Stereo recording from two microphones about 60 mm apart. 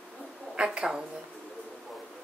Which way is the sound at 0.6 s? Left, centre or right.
Centre.